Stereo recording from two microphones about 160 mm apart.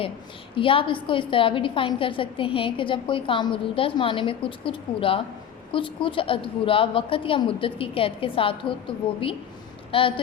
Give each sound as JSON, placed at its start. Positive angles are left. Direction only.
{"t": 0.5, "sound": "a woman's voice", "side_deg": 35}